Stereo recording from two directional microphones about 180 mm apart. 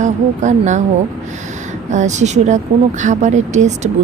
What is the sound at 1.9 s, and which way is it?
A woman's voice, 40° right (ahead or behind).